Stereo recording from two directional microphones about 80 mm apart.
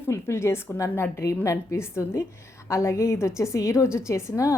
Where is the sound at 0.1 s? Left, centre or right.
Left.